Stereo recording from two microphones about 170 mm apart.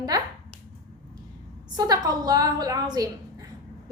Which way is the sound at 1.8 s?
20° right (ahead or behind).